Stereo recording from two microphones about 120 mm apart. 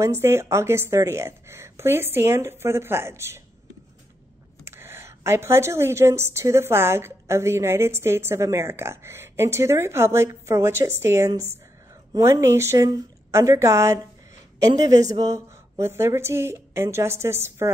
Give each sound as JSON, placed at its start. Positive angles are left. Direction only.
{"t": 0.0, "sound": "a woman's voice", "side_deg": -20}
{"t": 4.6, "sound": "a woman's voice", "side_deg": -20}